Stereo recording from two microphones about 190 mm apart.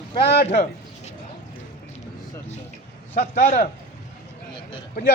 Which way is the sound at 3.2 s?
40° left (ahead or behind).